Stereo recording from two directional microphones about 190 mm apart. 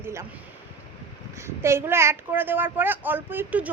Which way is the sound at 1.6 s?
15° right (ahead or behind).